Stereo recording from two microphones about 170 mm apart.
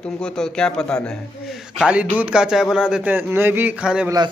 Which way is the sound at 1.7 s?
5° right (ahead or behind).